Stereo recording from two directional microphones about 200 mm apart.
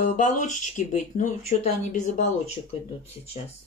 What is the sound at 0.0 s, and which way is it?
Speech, 40° left (ahead or behind).